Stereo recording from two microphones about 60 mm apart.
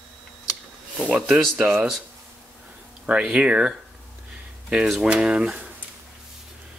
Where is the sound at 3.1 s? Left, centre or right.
Centre.